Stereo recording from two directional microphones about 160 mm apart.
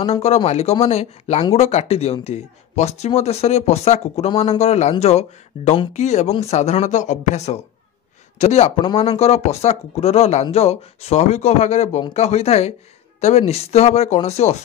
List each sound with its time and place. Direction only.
0.0 s speech: 40° left (ahead or behind)